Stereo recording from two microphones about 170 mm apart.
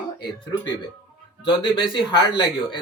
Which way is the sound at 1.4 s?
30° left (ahead or behind).